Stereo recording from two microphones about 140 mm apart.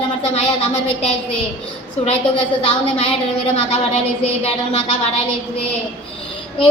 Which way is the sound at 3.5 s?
45° left (ahead or behind).